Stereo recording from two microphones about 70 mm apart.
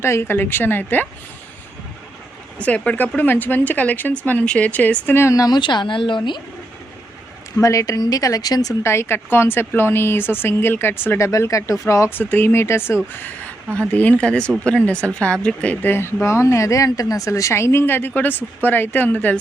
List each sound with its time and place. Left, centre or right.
0.0 s a woman's voice: left
2.6 s a woman's voice: centre
5.3 s speech: left
5.5 s a woman's voice: left
7.5 s speech: left
8.8 s a woman's voice: left
11.2 s speech: left
12.1 s a woman's voice: left
15.8 s a woman's voice: left